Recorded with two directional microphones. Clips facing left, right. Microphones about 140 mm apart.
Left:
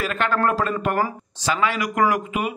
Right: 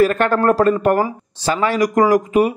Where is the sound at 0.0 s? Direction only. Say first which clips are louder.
Right 8 dB; 45° right (ahead or behind).